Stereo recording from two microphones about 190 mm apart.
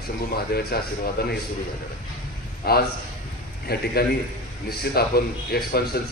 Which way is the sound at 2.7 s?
55° left (ahead or behind).